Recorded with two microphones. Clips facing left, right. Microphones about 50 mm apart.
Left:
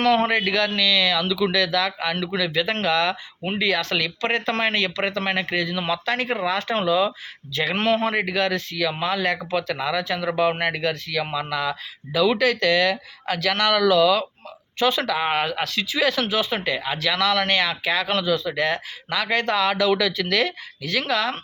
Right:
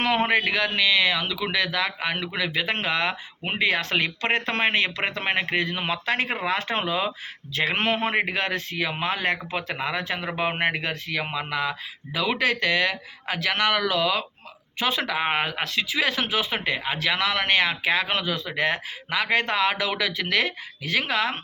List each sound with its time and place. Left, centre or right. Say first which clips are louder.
0.0 s speech: left 3 dB; centre
3.4 s speech: left 1 dB; right